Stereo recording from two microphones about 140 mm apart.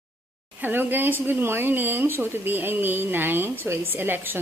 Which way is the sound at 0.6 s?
15° right (ahead or behind).